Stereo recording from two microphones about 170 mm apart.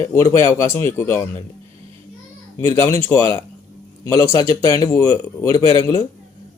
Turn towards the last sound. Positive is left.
turn(degrees=20)  # may be behind; listen again after turning